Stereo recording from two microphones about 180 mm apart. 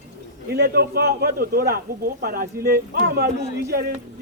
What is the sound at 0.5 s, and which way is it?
A man's voice, 60° right (ahead or behind).